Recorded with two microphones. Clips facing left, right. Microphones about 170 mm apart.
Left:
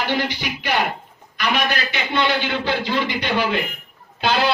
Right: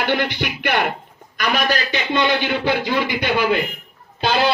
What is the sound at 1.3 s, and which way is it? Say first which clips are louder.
Music: right 2 dB; 40° right (ahead or behind).